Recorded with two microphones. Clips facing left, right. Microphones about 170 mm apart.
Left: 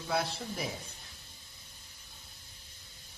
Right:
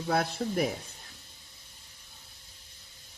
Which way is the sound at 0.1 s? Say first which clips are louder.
Right 5 dB; 60° right (ahead or behind).